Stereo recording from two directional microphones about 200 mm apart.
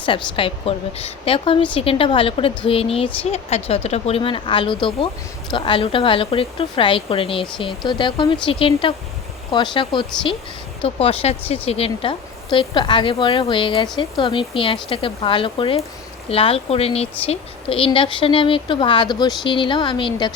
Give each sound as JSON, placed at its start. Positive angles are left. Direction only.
{"t": 0.0, "sound": "a woman's voice", "side_deg": 25}